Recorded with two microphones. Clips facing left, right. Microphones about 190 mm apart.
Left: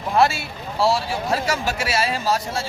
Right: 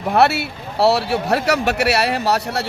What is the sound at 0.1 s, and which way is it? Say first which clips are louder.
Speech: right 3 dB; 65° right (ahead or behind).